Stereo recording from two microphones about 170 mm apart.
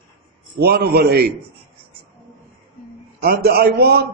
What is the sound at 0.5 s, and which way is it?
Speech, 65° right (ahead or behind).